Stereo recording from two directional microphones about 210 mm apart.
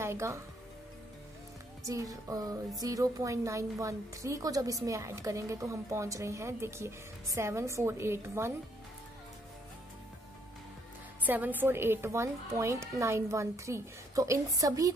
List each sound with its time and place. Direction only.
0.0 s speech: 15° right (ahead or behind)
1.8 s a woman's voice: 15° right (ahead or behind)
11.2 s a woman's voice: 10° right (ahead or behind)